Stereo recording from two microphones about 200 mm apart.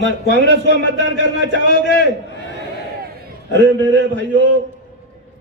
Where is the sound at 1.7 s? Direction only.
55° left (ahead or behind).